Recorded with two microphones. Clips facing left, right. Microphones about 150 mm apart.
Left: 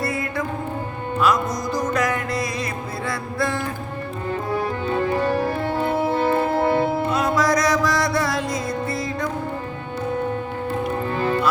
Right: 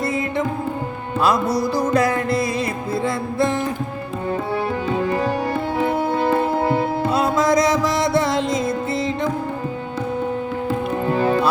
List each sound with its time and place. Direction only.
0.0 s music: 20° right (ahead or behind)
4.9 s organ: 10° right (ahead or behind)
7.1 s music: 30° right (ahead or behind)